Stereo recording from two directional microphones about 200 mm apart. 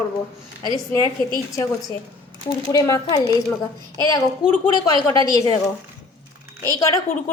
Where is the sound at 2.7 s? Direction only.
15° left (ahead or behind).